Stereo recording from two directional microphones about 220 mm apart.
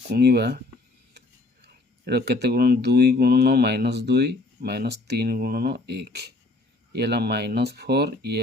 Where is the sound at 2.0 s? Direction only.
45° right (ahead or behind).